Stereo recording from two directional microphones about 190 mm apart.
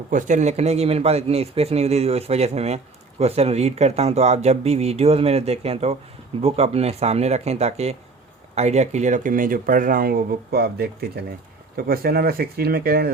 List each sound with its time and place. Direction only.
0.1 s a man's voice: 40° right (ahead or behind)